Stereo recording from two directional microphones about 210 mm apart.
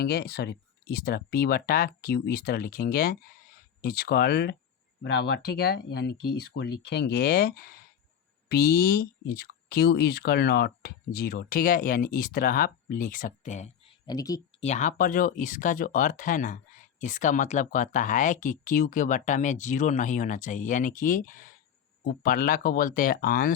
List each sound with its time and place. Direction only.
0.0 s speech: 50° left (ahead or behind); by 13.7 s 35° left (ahead or behind)
14.1 s speech: 15° left (ahead or behind)
14.6 s speech: 35° left (ahead or behind)